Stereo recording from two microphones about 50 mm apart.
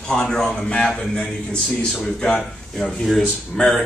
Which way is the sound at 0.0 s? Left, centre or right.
Centre.